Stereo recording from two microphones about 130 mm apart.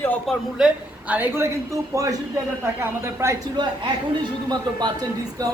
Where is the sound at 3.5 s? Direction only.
35° right (ahead or behind).